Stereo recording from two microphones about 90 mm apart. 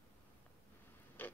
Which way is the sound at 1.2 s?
20° left (ahead or behind).